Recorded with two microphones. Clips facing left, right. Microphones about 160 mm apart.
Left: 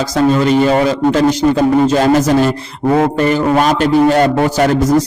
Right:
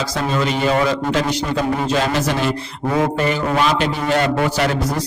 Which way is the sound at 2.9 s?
45° left (ahead or behind).